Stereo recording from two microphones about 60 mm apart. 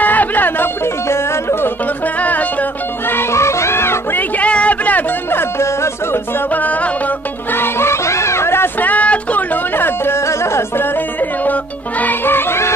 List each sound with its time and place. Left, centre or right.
0.0 s chatter: left
1.0 s music: left
3.1 s music: left
4.4 s a sound: left
5.3 s music: left
6.5 s music: left
7.5 s music: left
8.8 s a sound: left
9.8 s music: left
12.0 s music: left